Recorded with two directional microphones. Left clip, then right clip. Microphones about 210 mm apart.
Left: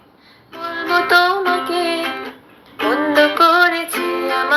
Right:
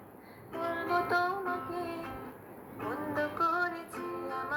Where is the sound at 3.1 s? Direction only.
30° left (ahead or behind).